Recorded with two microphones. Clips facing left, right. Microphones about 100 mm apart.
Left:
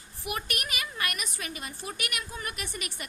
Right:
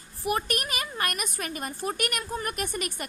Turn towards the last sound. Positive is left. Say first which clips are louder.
# right 7 dB
turn(degrees=-45)  # may be behind; listen again after turning